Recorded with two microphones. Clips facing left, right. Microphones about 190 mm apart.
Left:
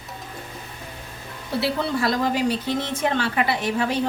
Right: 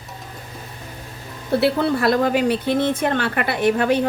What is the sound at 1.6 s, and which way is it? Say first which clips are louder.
Speech: right 4 dB; 60° right (ahead or behind).